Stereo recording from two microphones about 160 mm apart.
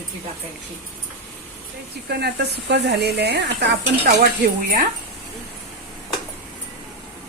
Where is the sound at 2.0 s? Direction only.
90° right.